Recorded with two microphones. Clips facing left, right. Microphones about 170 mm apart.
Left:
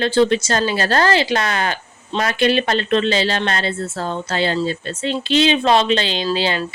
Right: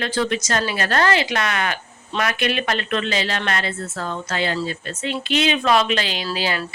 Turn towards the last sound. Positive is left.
turn(degrees=25)  # may be behind; listen again after turning